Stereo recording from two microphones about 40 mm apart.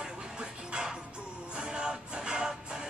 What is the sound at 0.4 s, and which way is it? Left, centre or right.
Music, centre.